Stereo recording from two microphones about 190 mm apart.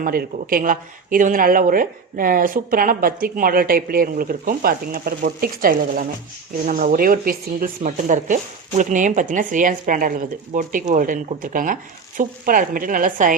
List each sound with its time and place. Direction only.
0.0 s speech: 50° right (ahead or behind)